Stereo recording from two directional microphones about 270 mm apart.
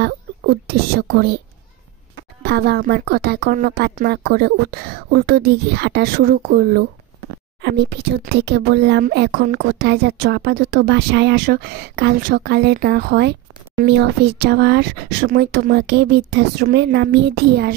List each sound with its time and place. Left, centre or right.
0.0 s speech: right
2.4 s speech: right